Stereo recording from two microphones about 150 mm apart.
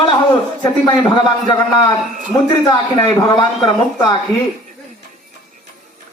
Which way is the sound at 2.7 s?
30° left (ahead or behind).